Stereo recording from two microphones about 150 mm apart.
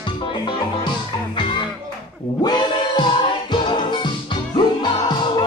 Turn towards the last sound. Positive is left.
turn(degrees=30)  # may be behind; listen again after turning